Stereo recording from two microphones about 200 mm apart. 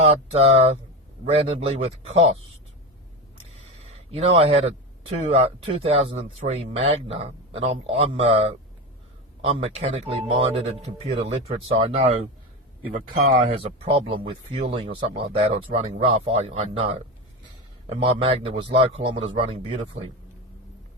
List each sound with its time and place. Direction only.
0.0 s speech: 30° right (ahead or behind)
3.8 s speech: 30° right (ahead or behind)
12.8 s speech: 45° right (ahead or behind)
13.5 s speech: 30° right (ahead or behind)